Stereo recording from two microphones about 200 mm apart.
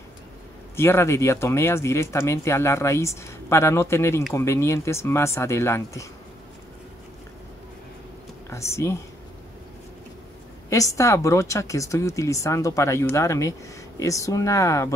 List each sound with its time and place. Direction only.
0.7 s speech: 15° left (ahead or behind)
8.5 s speech: 15° left (ahead or behind)
10.7 s speech: 15° left (ahead or behind)